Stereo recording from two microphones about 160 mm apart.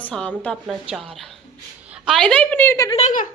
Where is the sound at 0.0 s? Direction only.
5° left (ahead or behind).